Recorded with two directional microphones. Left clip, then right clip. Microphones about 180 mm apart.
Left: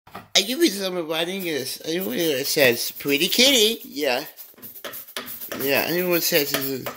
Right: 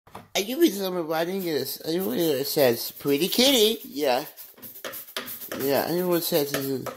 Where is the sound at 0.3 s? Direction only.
15° right (ahead or behind).